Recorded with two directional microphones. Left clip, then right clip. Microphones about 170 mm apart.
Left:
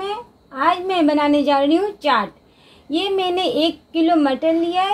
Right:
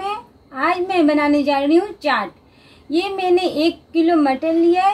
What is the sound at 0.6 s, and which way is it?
A woman's voice, 30° left (ahead or behind).